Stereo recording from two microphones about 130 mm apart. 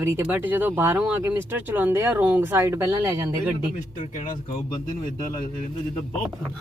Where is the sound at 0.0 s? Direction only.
20° right (ahead or behind).